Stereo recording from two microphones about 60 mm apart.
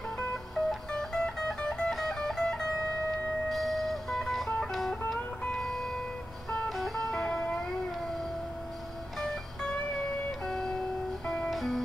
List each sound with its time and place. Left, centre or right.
0.6 s music: centre
9.2 s music: centre
11.5 s music: centre